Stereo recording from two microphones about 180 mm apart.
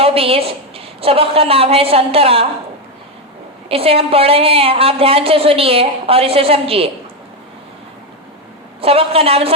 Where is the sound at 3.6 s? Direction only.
30° right (ahead or behind).